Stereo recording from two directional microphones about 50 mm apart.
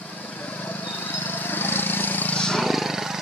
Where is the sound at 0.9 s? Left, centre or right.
Left.